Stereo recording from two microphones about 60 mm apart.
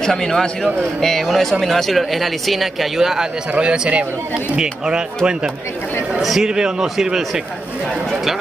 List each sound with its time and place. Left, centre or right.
0.0 s a man's voice: centre
6.2 s speech: centre